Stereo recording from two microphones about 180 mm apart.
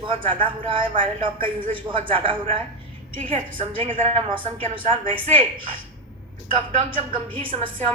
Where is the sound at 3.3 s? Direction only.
30° right (ahead or behind).